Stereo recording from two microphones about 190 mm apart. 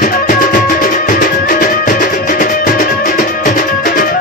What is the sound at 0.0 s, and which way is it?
Music, 45° left (ahead or behind).